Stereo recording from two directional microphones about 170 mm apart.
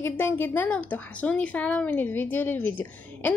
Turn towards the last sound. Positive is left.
turn(degrees=10)  # may be behind; listen again after turning